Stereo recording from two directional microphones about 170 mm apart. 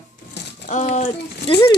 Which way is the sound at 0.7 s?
45° left (ahead or behind).